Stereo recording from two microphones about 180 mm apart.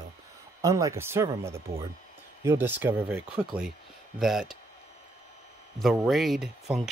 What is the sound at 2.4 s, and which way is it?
Speech, 10° right (ahead or behind).